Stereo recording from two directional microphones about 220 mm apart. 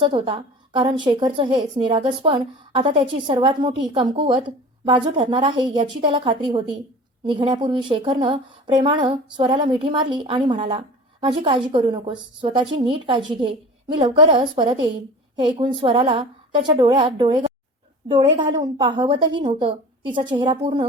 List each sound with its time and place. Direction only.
0.0 s a woman's voice: 25° right (ahead or behind)